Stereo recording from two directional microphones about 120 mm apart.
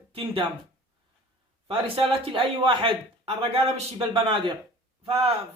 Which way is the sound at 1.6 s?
50° right (ahead or behind).